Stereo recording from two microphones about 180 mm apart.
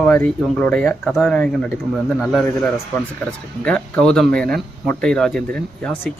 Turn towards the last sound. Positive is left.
turn(degrees=5)  # may be behind; listen again after turning